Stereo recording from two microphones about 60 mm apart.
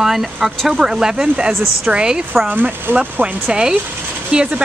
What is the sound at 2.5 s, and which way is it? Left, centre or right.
Speech, right.